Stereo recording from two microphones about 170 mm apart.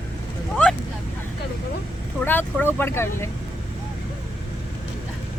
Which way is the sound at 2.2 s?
10° left (ahead or behind).